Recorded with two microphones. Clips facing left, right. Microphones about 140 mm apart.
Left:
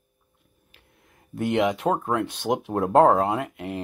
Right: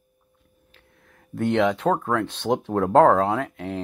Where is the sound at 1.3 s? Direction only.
5° left (ahead or behind).